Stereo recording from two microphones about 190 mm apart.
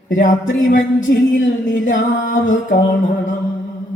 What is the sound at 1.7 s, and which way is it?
Music, 45° left (ahead or behind).